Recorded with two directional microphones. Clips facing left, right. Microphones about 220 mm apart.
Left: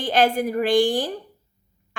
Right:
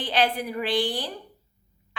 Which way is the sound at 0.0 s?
45° left (ahead or behind).